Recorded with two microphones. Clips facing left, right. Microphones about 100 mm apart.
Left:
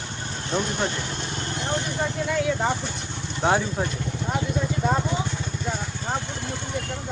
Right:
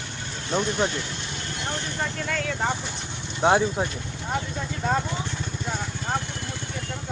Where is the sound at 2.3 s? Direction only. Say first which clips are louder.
Left 4 dB; 15° left (ahead or behind).